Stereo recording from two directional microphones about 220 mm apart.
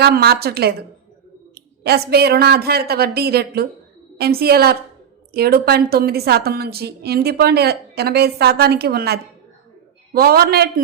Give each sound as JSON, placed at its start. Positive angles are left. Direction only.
{"t": 0.0, "sound": "a woman's voice", "side_deg": -45}
{"t": 2.0, "sound": "a woman's voice", "side_deg": -45}